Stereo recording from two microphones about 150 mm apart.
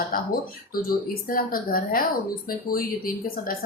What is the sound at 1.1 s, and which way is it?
Speech, 70° left (ahead or behind).